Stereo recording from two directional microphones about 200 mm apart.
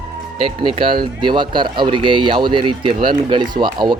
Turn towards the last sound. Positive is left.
turn(degrees=-20)  # may be behind; listen again after turning